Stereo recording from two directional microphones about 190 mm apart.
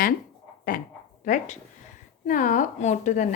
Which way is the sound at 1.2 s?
40° left (ahead or behind).